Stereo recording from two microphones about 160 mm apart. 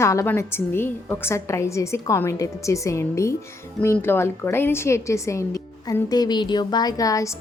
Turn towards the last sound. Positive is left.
turn(degrees=20)  # may be behind; listen again after turning